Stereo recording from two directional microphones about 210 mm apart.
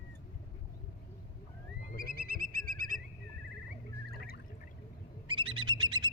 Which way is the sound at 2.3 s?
45° right (ahead or behind).